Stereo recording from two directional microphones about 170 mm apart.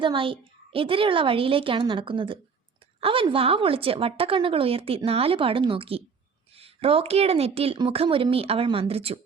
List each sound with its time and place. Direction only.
0.0 s a woman's voice: 30° right (ahead or behind)